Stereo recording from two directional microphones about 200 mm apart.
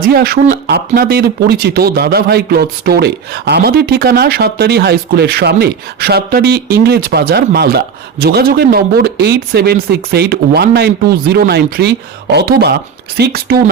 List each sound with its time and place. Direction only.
0.1 s speech: 50° right (ahead or behind)